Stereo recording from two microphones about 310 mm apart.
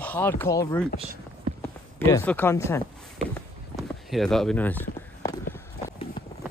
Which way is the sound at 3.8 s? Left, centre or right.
Centre.